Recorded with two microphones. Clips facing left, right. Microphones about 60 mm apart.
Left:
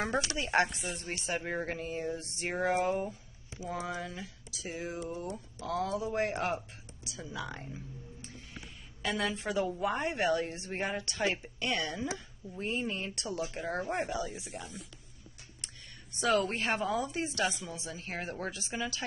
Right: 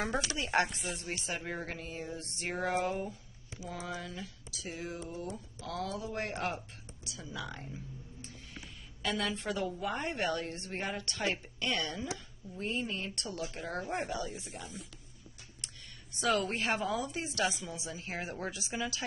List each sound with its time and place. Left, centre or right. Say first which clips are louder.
0.1 s a woman's voice: left 2 dB; centre
3.5 s speech: left 5 dB; left
3.8 s a woman's voice: left 2 dB; centre
16.2 s a woman's voice: left 2 dB; centre